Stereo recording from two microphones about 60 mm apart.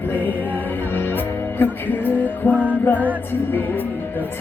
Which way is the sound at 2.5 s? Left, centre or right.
Right.